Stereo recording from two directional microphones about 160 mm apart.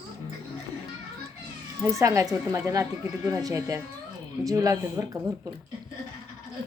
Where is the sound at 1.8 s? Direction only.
20° right (ahead or behind).